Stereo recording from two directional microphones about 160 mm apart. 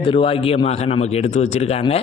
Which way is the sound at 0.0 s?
35° left (ahead or behind).